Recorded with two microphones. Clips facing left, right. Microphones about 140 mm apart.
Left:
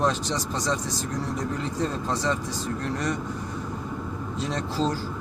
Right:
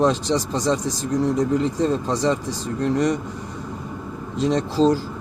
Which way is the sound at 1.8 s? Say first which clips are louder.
Right 6 dB; 20° right (ahead or behind).